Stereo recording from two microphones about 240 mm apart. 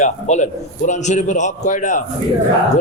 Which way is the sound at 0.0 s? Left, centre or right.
Left.